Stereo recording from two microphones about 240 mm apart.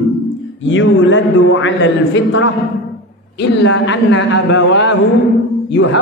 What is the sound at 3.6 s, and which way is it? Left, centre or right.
A man's voice, left.